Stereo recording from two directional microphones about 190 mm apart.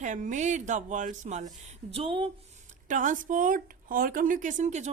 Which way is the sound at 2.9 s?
40° right (ahead or behind).